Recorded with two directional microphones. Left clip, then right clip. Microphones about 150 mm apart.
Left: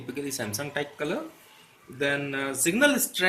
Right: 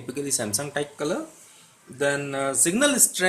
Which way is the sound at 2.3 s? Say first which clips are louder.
Right 3 dB; 40° right (ahead or behind).